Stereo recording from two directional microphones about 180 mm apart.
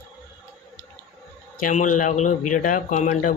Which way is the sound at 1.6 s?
45° left (ahead or behind).